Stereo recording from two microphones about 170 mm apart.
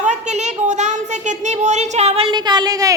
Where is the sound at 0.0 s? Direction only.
45° right (ahead or behind).